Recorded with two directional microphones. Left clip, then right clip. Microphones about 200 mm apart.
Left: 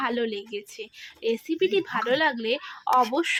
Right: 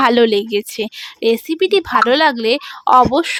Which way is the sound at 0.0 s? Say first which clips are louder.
Right 15 dB; 55° right (ahead or behind).